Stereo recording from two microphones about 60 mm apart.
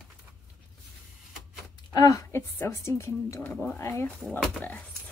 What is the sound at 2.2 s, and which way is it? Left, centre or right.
Speech, left.